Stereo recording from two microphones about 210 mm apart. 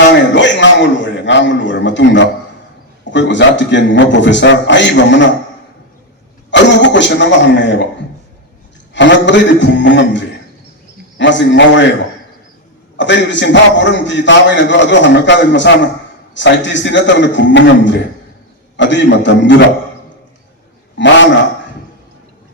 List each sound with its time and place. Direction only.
0.3 s a man's voice: 60° left (ahead or behind)
6.5 s a man's voice: 60° left (ahead or behind)
8.9 s a man's voice: 60° left (ahead or behind)
11.2 s a man's voice: 60° left (ahead or behind)
13.0 s a man's voice: 60° left (ahead or behind)